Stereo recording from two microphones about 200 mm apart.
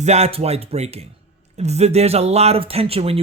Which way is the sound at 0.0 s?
35° right (ahead or behind).